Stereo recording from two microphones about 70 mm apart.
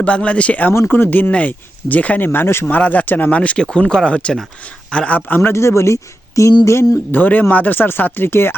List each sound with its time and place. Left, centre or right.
0.0 s speech: centre; by 6.5 s left
7.1 s speech: left